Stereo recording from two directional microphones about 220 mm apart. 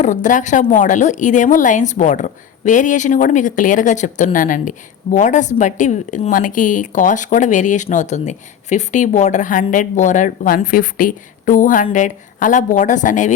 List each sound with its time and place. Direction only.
0.0 s a woman's voice: 35° left (ahead or behind)